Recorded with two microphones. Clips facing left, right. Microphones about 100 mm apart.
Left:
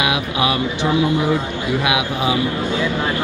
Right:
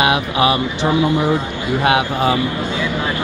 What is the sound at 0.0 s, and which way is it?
Speech, 50° right (ahead or behind).